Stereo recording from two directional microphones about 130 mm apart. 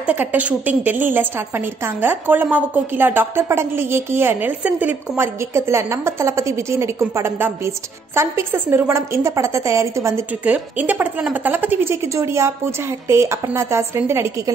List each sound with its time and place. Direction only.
0.0 s a woman's voice: 15° right (ahead or behind)
10.4 s a woman's voice: 10° right (ahead or behind)